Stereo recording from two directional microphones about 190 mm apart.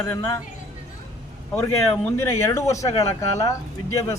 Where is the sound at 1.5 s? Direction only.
10° left (ahead or behind).